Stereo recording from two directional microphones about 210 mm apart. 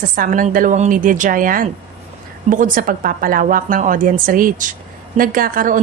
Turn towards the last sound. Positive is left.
turn(degrees=-40)  # may be behind; listen again after turning